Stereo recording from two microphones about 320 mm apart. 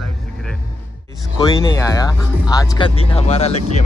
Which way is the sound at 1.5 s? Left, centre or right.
Centre.